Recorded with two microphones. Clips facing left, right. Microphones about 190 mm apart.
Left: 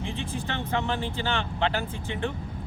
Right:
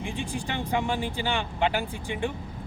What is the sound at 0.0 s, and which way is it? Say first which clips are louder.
Speech: even; 15° right (ahead or behind).